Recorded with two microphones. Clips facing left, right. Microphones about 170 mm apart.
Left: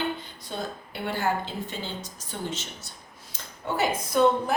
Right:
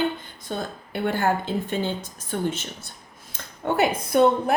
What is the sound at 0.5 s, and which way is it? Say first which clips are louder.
A woman's voice: right 4 dB; 50° right (ahead or behind).